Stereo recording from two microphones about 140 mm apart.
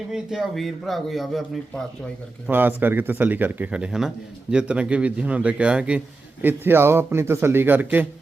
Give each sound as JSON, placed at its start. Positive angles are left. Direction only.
{"t": 0.1, "sound": "a man's voice", "side_deg": -5}
{"t": 2.5, "sound": "speech", "side_deg": -15}